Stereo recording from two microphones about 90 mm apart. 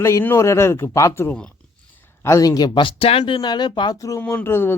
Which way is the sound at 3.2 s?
55° left (ahead or behind).